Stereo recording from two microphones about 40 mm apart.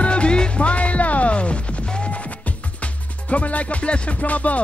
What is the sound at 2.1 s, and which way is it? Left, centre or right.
Music, left.